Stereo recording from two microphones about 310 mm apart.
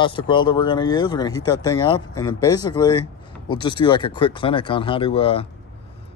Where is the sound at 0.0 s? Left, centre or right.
Centre.